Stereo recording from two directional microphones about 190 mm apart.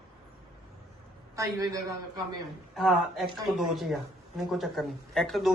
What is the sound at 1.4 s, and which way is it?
Speech, 15° right (ahead or behind).